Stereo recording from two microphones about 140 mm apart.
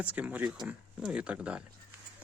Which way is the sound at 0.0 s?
10° right (ahead or behind).